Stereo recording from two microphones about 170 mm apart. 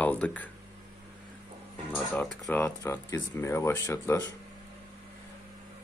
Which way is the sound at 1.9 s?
10° left (ahead or behind).